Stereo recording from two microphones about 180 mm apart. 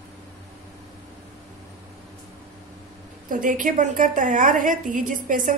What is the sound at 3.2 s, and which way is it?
A woman's voice, 50° right (ahead or behind).